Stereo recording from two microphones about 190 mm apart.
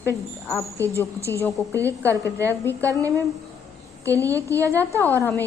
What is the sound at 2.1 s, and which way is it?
A woman's voice, 15° right (ahead or behind).